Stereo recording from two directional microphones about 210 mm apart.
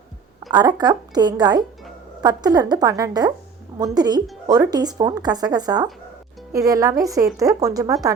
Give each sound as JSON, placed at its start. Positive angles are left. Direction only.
{"t": 0.5, "sound": "speech", "side_deg": -20}